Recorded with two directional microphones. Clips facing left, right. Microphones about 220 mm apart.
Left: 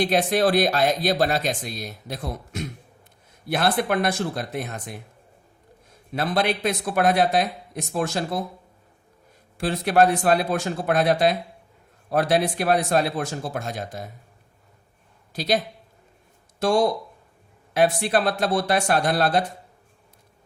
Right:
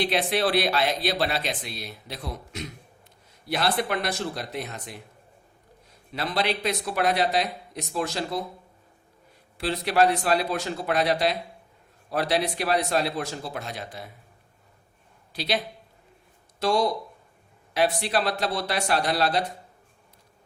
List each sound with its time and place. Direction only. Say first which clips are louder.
0.0 s speech: left 4 dB; 45° left (ahead or behind)
6.1 s speech: left 4 dB; 50° left (ahead or behind)
9.6 s speech: left 3 dB; 50° left (ahead or behind)
15.3 s speech: left 4 dB; 45° left (ahead or behind)